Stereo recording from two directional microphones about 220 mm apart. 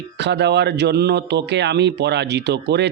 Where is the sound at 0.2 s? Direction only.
50° right (ahead or behind).